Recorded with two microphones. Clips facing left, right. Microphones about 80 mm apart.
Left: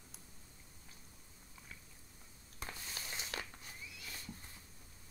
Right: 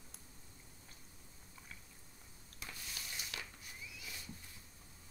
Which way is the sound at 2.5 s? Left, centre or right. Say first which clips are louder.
Left 3 dB; left.